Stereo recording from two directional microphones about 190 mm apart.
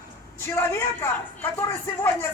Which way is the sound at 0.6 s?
15° left (ahead or behind).